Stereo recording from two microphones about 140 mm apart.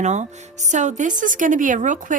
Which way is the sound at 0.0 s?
55° right (ahead or behind).